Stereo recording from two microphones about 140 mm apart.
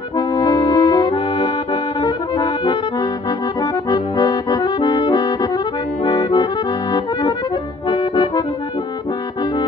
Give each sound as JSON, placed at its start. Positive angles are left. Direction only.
{"t": 0.4, "sound": "accordion", "side_deg": 30}
{"t": 3.9, "sound": "accordion", "side_deg": 25}